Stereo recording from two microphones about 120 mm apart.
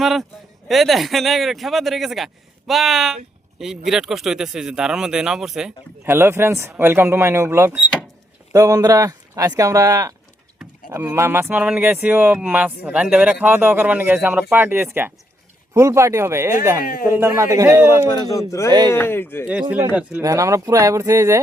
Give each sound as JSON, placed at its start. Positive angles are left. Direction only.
{"t": 0.0, "sound": "speech", "side_deg": 0}
{"t": 6.1, "sound": "a man's voice", "side_deg": -20}
{"t": 18.3, "sound": "speech", "side_deg": 25}
{"t": 19.9, "sound": "speech", "side_deg": -10}
{"t": 20.2, "sound": "a man's voice", "side_deg": -25}